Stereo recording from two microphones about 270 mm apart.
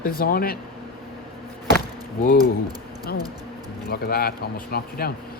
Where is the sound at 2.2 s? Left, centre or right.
Left.